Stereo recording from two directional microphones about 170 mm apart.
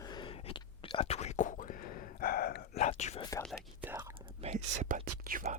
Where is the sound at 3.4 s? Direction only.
5° right (ahead or behind).